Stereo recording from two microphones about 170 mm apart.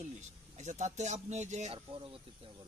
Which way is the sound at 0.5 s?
45° right (ahead or behind).